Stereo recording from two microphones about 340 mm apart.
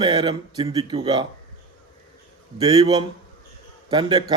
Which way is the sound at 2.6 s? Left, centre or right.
Centre.